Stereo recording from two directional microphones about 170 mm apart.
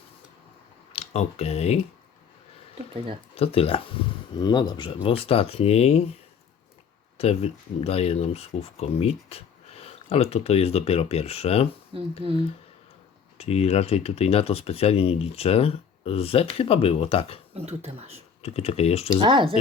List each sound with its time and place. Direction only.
0.9 s speech: 35° left (ahead or behind)
3.3 s speech: 35° left (ahead or behind)
7.2 s speech: 35° left (ahead or behind)
11.9 s speech: 30° right (ahead or behind)
13.4 s speech: 35° left (ahead or behind)
17.5 s speech: 40° right (ahead or behind)
18.4 s speech: 35° left (ahead or behind)
19.2 s speech: 30° right (ahead or behind)